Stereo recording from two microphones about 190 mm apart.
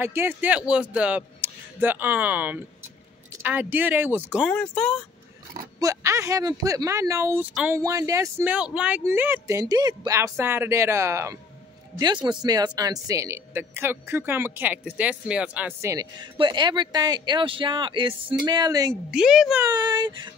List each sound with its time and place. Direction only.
0.0 s speech: 10° right (ahead or behind)
4.5 s a woman's voice: 5° left (ahead or behind)
5.8 s speech: 15° right (ahead or behind)
19.0 s a woman's voice: 5° right (ahead or behind)
19.6 s speech: 20° right (ahead or behind)